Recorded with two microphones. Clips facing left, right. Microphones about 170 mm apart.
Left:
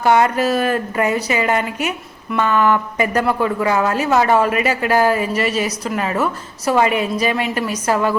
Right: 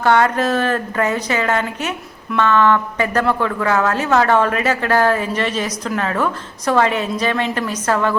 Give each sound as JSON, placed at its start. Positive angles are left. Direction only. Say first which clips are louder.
{"t": 0.0, "sound": "a woman's voice", "louder": "left 1 dB", "side_deg": 10}